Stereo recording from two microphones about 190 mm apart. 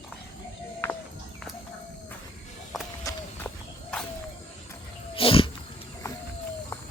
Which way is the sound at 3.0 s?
15° left (ahead or behind).